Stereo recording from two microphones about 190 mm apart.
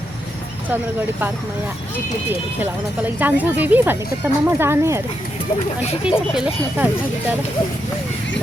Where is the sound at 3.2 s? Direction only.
10° right (ahead or behind).